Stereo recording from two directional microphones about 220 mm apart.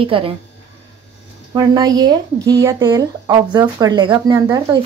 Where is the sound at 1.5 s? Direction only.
20° right (ahead or behind).